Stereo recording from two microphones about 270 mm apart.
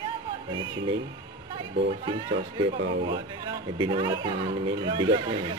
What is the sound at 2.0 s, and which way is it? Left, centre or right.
Speech, centre.